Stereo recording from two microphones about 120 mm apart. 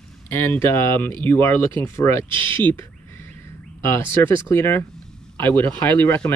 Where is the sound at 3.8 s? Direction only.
20° left (ahead or behind).